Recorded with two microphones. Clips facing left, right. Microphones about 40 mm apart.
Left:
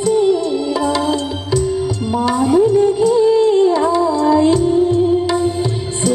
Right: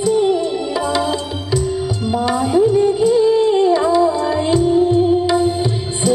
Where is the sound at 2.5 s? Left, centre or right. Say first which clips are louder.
Even; centre.